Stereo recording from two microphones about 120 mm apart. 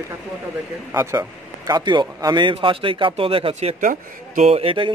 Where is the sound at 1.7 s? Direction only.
40° right (ahead or behind).